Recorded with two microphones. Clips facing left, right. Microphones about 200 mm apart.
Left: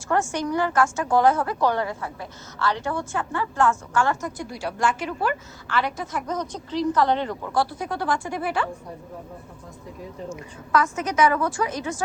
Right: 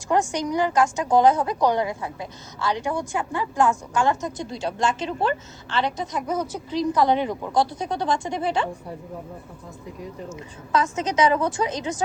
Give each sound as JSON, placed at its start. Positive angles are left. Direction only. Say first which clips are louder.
{"t": 0.1, "sound": "a woman's voice", "louder": "right 1 dB", "side_deg": -15}
{"t": 6.2, "sound": "a woman's voice", "louder": "right 3 dB", "side_deg": -5}
{"t": 10.2, "sound": "a woman's voice", "louder": "left 1 dB", "side_deg": -20}